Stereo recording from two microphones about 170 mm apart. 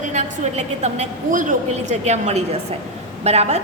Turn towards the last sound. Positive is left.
turn(degrees=-40)  # may be behind; listen again after turning